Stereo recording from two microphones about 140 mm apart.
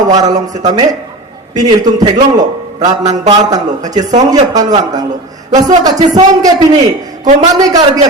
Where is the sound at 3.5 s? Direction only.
25° right (ahead or behind).